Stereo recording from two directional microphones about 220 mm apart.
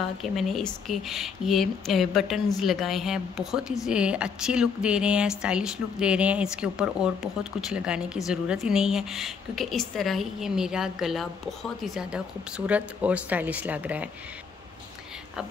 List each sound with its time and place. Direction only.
0.2 s a woman's voice: centre (ahead or behind)